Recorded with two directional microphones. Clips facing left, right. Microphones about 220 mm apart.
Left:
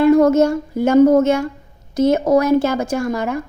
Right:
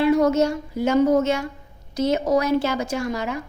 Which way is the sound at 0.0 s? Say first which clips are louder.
Left 6 dB; 50° left (ahead or behind).